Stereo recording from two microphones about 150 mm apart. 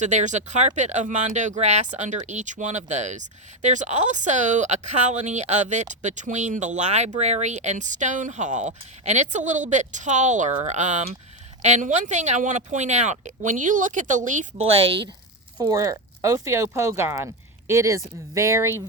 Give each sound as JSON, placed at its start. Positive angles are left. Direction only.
{"t": 0.0, "sound": "speech", "side_deg": -55}
{"t": 14.8, "sound": "speech", "side_deg": -35}